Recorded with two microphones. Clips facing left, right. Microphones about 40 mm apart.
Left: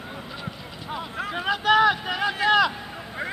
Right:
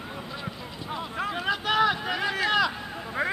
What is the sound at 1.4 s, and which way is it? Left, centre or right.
Speech, centre.